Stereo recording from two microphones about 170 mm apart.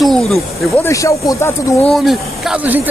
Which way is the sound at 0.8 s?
20° left (ahead or behind).